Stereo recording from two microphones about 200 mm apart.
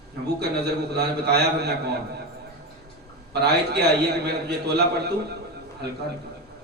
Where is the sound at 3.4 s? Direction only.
55° right (ahead or behind).